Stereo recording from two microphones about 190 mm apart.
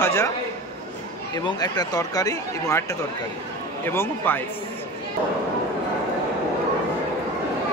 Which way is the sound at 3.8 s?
10° left (ahead or behind).